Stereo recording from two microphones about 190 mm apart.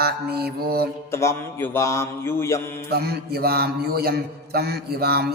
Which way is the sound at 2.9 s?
55° right (ahead or behind).